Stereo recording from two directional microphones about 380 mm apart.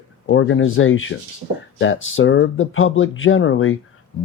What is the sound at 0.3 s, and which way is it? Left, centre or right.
Speech, left.